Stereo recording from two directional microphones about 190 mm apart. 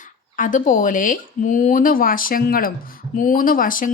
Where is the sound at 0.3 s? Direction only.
40° left (ahead or behind).